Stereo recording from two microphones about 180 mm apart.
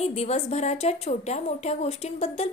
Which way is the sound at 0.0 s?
35° left (ahead or behind).